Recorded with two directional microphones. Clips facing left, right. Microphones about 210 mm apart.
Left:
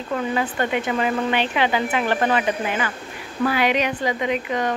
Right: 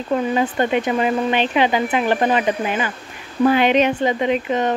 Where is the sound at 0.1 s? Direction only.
25° right (ahead or behind).